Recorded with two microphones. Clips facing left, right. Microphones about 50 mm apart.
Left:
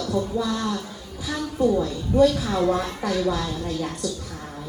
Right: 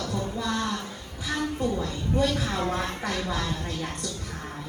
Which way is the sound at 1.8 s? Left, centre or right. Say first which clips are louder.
Left 7 dB; right.